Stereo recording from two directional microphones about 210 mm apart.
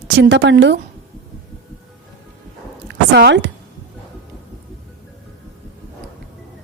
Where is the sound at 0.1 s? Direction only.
60° right (ahead or behind).